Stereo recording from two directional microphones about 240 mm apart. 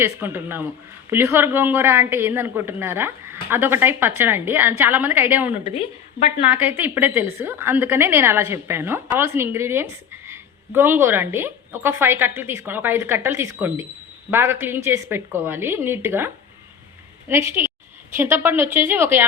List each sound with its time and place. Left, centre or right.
0.0 s a woman's voice: centre
5.6 s a woman's voice: left
6.5 s a woman's voice: centre